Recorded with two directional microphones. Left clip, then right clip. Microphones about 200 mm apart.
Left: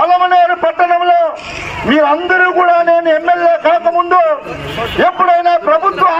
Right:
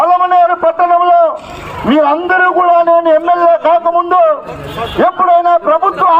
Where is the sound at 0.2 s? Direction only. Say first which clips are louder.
Right 1 dB; 30° right (ahead or behind).